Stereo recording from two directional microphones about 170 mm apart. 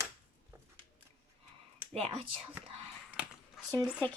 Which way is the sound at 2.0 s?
35° right (ahead or behind).